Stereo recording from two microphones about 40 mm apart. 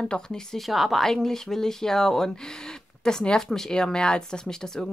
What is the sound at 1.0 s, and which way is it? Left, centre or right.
Speech, centre.